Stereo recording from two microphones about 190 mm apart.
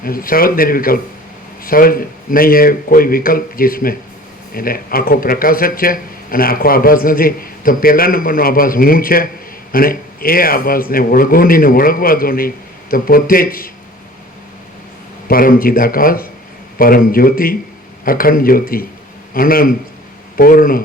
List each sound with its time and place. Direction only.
0.0 s a man's voice: 50° left (ahead or behind)
15.3 s a man's voice: 50° left (ahead or behind)